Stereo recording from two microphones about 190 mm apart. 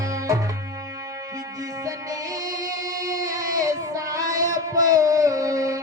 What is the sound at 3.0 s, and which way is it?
Child singing, 15° right (ahead or behind).